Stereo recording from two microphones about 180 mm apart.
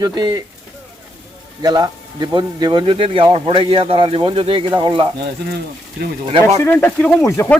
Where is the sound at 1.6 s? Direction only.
20° right (ahead or behind).